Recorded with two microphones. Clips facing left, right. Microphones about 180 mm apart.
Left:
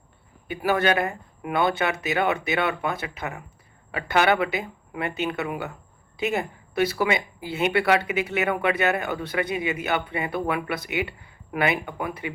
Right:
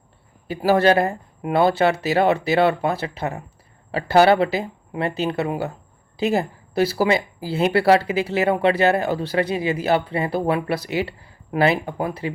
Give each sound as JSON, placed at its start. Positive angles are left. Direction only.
{"t": 0.4, "sound": "speech", "side_deg": -30}